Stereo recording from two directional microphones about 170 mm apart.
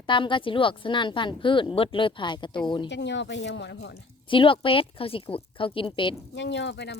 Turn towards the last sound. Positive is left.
turn(degrees=80)